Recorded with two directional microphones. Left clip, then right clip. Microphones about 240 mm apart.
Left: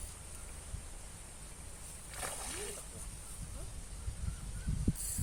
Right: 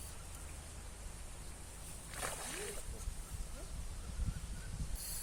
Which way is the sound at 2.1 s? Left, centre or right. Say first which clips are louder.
Even; centre.